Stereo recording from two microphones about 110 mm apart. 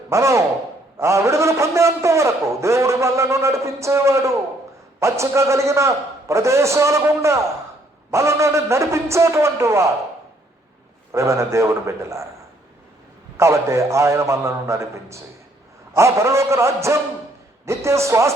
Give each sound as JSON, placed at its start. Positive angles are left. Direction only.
{"t": 0.1, "sound": "a man's voice", "side_deg": -25}
{"t": 11.1, "sound": "a man's voice", "side_deg": -25}
{"t": 13.3, "sound": "a man's voice", "side_deg": -25}